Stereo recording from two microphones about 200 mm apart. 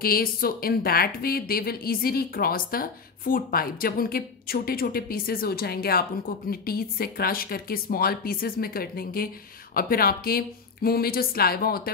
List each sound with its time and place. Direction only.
0.0 s a woman's voice: 50° left (ahead or behind)